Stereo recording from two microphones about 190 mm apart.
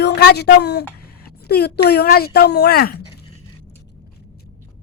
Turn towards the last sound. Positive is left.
turn(degrees=55)  # may be behind; listen again after turning